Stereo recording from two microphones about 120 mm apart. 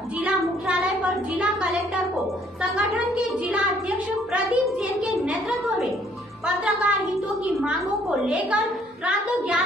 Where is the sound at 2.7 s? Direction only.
5° right (ahead or behind).